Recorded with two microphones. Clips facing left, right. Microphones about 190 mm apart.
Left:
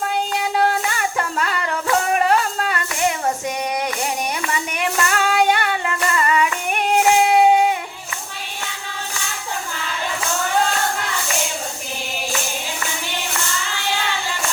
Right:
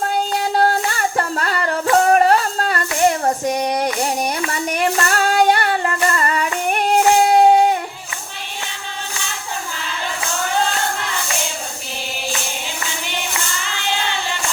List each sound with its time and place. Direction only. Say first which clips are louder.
0.3 s music: right 2 dB; 35° right (ahead or behind)
4.7 s female singing: right 4 dB; 40° right (ahead or behind)
7.3 s music: right 2 dB; 35° right (ahead or behind)